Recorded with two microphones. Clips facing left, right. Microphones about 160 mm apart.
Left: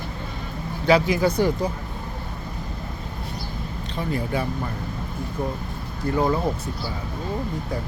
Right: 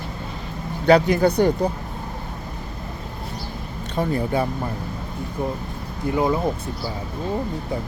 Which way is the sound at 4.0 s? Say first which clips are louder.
Right 4 dB; 35° right (ahead or behind).